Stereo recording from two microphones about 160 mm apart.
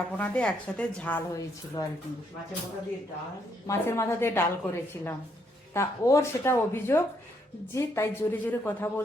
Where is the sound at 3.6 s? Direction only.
15° left (ahead or behind).